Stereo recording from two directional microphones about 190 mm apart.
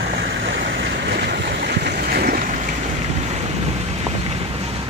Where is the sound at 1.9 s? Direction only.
55° right (ahead or behind).